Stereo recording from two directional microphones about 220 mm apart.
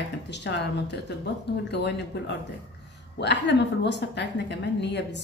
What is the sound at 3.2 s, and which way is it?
A woman's voice, 50° left (ahead or behind).